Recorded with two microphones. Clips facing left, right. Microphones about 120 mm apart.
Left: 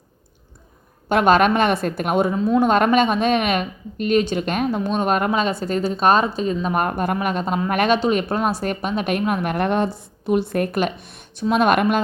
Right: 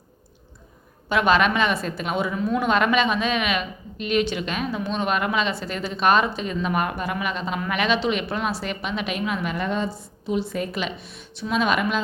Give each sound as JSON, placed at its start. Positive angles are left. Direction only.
{"t": 1.1, "sound": "a woman's voice", "side_deg": 50}
{"t": 2.3, "sound": "speech", "side_deg": 30}
{"t": 2.6, "sound": "a woman's voice", "side_deg": 45}